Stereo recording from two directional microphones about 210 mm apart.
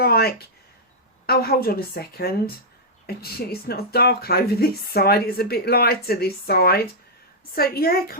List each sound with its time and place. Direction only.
0.0 s speech: 45° left (ahead or behind)